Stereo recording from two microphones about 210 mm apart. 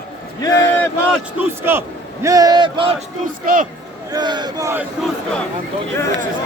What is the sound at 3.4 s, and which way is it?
Speech, 40° right (ahead or behind).